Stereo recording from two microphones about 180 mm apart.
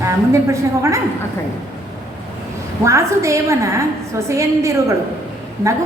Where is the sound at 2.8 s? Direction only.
15° right (ahead or behind).